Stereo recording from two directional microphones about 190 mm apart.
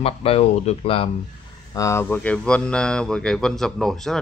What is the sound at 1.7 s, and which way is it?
Speech, 15° left (ahead or behind).